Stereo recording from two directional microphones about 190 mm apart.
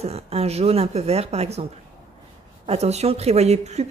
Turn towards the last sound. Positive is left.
turn(degrees=-35)  # may be behind; listen again after turning